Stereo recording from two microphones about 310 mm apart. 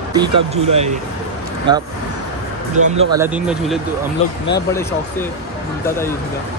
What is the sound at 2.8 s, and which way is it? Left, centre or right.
Speech, right.